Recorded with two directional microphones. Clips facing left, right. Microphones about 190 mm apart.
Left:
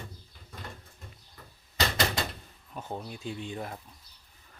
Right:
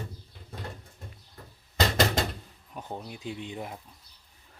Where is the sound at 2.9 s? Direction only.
10° right (ahead or behind).